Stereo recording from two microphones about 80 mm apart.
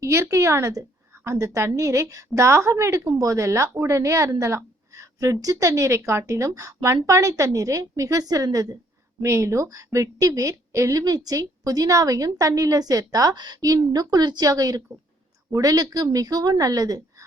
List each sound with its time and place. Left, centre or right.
0.0 s a woman's voice: right